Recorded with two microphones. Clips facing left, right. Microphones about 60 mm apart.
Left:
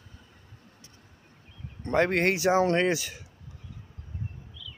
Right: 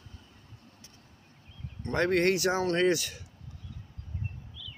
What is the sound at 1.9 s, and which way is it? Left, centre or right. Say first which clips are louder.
Speech: left 2 dB; centre.